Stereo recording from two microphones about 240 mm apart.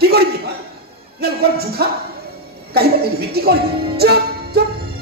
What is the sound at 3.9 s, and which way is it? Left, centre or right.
Music, right.